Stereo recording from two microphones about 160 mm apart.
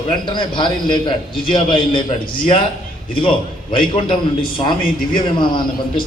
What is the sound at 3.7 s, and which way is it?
A man's voice, 30° left (ahead or behind).